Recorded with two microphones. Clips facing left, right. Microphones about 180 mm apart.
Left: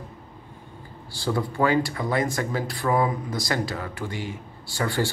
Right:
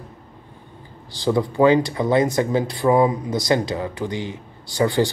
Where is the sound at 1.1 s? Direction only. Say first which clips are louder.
Right 6 dB; 20° right (ahead or behind).